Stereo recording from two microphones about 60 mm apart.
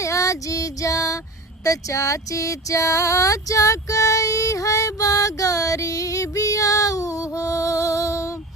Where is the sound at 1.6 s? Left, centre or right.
Left.